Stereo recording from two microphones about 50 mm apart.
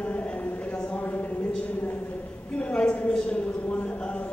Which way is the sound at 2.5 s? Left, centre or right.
Left.